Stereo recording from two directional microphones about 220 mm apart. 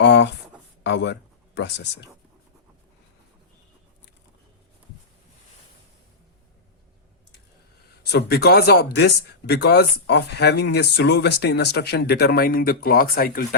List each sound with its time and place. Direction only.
0.0 s a sound: 55° left (ahead or behind)
0.9 s speech: 50° left (ahead or behind)
8.1 s speech: 45° left (ahead or behind)